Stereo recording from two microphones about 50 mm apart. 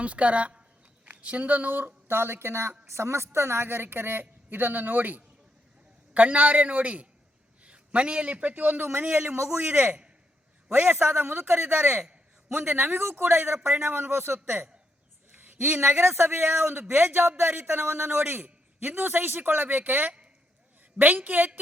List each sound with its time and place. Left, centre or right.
0.0 s a man's voice: right
2.0 s a man's voice: right
2.8 s a woman's voice: right
9.7 s a man's voice: right
10.7 s a man's voice: right
11.2 s a woman's voice: right